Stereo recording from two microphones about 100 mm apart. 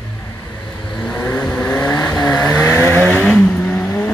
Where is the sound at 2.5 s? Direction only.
25° left (ahead or behind).